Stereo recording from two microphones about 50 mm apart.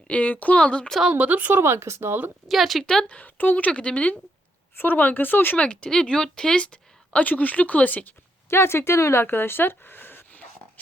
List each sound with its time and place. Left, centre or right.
0.1 s speech: left
0.6 s a woman's voice: left
1.1 s speech: right
1.6 s speech: right
2.5 s speech: centre
2.8 s speech: centre
3.2 s a woman's voice: left
4.8 s speech: left
5.5 s a woman's voice: left
8.4 s speech: left